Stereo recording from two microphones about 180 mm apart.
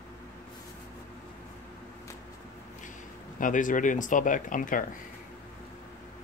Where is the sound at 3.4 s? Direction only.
45° left (ahead or behind).